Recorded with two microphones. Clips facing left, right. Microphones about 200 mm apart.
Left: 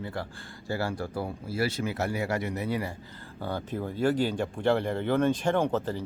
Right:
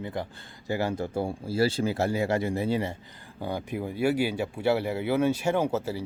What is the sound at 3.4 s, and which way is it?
Speech, 15° right (ahead or behind).